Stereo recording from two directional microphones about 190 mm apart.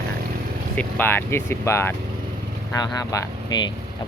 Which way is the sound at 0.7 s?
10° left (ahead or behind).